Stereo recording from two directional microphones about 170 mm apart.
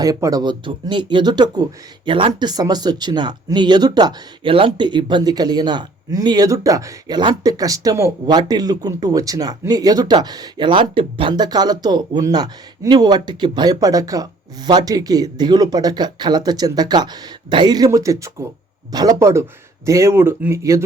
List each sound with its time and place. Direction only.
0.0 s speech: 20° right (ahead or behind)